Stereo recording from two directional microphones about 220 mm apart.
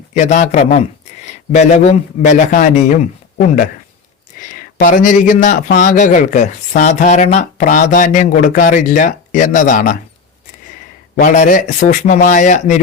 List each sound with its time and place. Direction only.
0.1 s a man's voice: 30° left (ahead or behind)
11.2 s speech: 35° left (ahead or behind)